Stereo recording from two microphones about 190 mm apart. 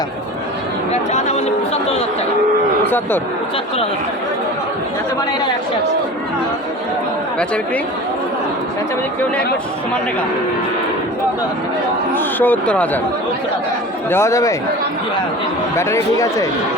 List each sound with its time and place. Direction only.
1.1 s speech: 35° left (ahead or behind)
2.8 s a man's voice: 10° left (ahead or behind)
12.1 s speech: 10° left (ahead or behind)
14.1 s speech: 15° left (ahead or behind)
15.7 s speech: 15° left (ahead or behind)